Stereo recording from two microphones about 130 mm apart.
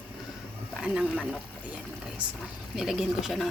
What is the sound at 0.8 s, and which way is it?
Speech, 5° right (ahead or behind).